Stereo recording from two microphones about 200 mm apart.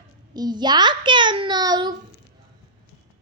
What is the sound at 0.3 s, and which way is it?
A child's voice, 20° right (ahead or behind).